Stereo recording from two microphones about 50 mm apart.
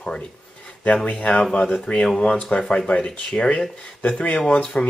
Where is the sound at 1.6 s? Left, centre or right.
Centre.